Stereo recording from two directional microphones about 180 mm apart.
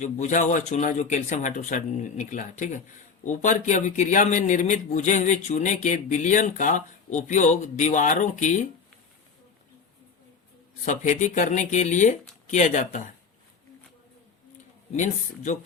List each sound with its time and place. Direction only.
0.0 s a man's voice: 45° left (ahead or behind)
10.8 s a man's voice: 40° left (ahead or behind)